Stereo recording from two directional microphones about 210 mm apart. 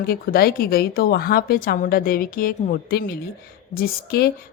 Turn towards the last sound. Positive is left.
turn(degrees=45)  # may be behind; listen again after turning